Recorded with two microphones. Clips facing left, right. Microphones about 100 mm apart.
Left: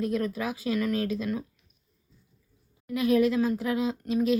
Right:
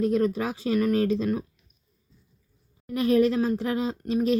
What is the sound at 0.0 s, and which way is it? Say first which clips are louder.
Speech: right 5 dB; 30° right (ahead or behind).